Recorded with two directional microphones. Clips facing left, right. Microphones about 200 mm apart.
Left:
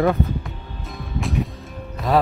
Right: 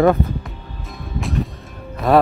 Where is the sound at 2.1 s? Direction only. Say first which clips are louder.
Right 5 dB; 60° right (ahead or behind).